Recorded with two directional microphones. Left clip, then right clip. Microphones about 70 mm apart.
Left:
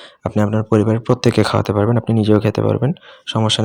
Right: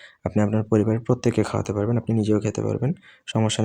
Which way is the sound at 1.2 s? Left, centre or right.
Left.